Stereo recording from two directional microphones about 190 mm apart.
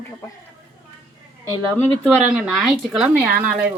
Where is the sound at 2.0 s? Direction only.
Centre (ahead or behind).